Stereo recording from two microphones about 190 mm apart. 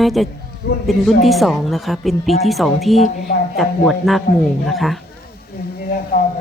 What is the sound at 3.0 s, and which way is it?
Speech, 50° left (ahead or behind).